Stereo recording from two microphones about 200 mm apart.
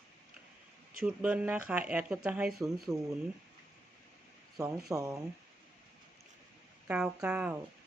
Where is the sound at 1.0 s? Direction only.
5° right (ahead or behind).